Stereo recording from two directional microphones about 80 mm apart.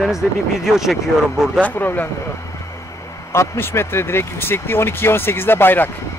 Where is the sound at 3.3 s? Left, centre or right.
Left.